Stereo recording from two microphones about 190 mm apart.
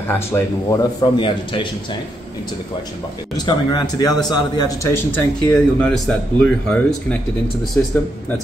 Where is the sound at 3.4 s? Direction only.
20° left (ahead or behind).